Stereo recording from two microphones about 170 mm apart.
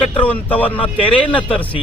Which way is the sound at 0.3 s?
10° left (ahead or behind).